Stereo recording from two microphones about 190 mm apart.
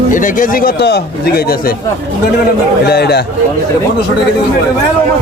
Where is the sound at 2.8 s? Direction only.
55° left (ahead or behind).